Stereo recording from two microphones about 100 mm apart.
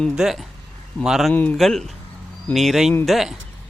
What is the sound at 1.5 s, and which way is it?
Speech, 5° left (ahead or behind).